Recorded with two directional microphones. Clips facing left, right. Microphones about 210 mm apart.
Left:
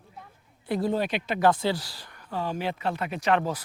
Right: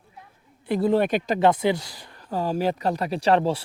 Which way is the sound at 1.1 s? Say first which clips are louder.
Right 6 dB; 40° right (ahead or behind).